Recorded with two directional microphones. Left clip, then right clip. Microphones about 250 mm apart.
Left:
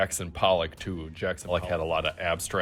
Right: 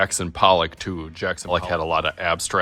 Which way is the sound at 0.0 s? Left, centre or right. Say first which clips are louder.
Right 7 dB; centre.